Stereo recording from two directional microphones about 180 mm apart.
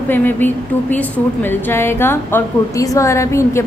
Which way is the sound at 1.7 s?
10° left (ahead or behind).